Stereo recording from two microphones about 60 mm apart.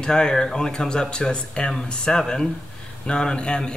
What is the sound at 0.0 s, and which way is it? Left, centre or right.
Speech, centre.